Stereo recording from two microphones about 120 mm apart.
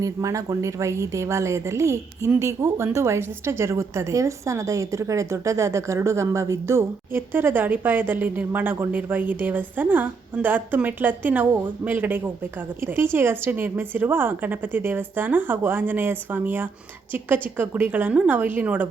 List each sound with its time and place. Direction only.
0.0 s a woman's voice: 30° right (ahead or behind)